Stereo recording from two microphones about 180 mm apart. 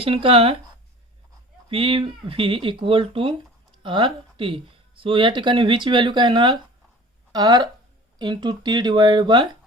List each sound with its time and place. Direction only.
0.0 s speech: 30° right (ahead or behind)
1.7 s speech: 30° right (ahead or behind)